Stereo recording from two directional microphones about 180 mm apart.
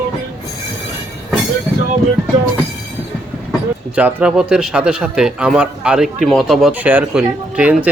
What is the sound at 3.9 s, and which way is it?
A man's voice, 5° right (ahead or behind).